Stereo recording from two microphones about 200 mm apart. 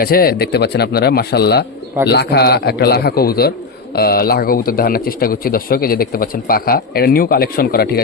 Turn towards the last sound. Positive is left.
turn(degrees=50)  # may be behind; listen again after turning